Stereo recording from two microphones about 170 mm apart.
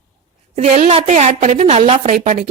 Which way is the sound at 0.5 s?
40° right (ahead or behind).